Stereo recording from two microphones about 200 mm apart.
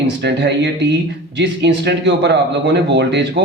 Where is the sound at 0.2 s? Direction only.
60° right (ahead or behind).